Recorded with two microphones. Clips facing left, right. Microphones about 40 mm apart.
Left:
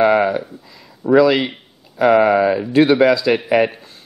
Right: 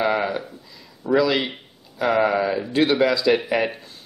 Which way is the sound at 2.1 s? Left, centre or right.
Left.